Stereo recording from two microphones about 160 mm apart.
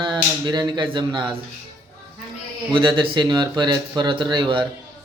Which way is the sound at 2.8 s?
30° right (ahead or behind).